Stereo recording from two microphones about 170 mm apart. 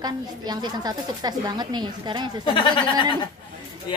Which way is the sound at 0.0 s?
25° right (ahead or behind).